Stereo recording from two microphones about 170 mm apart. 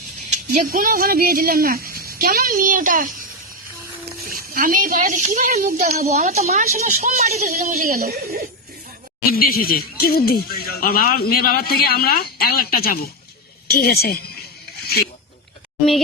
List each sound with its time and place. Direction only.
0.7 s speech: 55° right (ahead or behind)
4.3 s speech: 55° right (ahead or behind)
5.5 s speech: 60° right (ahead or behind)
5.7 s speech: 45° right (ahead or behind); by 8.4 s 60° right (ahead or behind)
9.3 s speech: 60° left (ahead or behind)